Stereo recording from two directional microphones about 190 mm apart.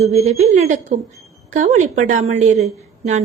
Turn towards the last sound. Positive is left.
turn(degrees=-35)  # may be behind; listen again after turning